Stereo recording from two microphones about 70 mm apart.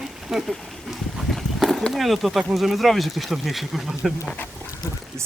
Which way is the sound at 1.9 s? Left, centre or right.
Centre.